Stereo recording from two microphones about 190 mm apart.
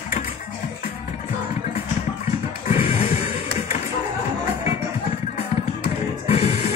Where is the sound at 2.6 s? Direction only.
30° left (ahead or behind).